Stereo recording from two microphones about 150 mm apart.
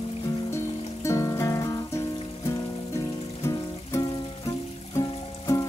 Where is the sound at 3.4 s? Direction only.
20° left (ahead or behind).